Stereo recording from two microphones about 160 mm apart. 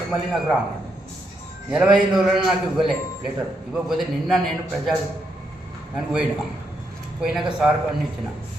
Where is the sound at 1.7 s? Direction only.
5° right (ahead or behind).